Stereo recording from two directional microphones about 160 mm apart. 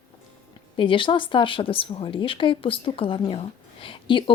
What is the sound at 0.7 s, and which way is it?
A woman's voice, 30° left (ahead or behind).